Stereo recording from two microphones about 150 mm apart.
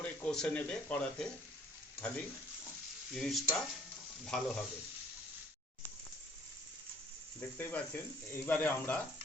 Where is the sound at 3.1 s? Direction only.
Centre (ahead or behind).